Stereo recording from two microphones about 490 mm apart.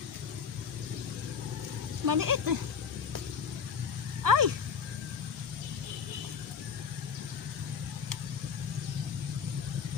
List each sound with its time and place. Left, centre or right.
2.0 s speech: right
4.2 s dog: right